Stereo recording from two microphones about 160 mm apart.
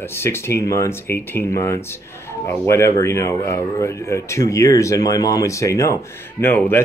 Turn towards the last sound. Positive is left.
turn(degrees=10)  # may be behind; listen again after turning